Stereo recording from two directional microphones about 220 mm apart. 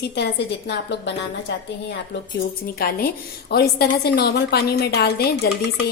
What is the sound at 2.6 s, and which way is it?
A woman's voice, 40° left (ahead or behind).